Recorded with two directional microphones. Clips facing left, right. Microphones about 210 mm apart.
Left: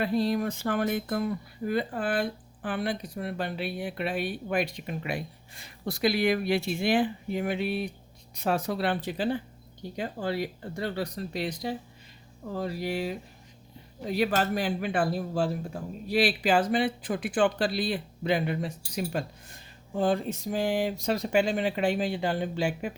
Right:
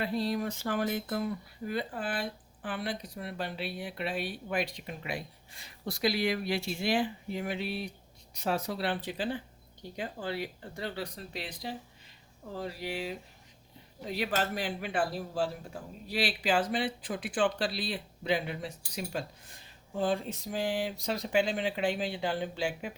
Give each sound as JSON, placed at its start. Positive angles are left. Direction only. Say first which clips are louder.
{"t": 0.0, "sound": "speech", "louder": "left 5 dB", "side_deg": 50}
{"t": 10.8, "sound": "speech", "louder": "left 6 dB", "side_deg": 40}